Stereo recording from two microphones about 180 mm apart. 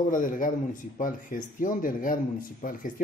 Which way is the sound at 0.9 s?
50° left (ahead or behind).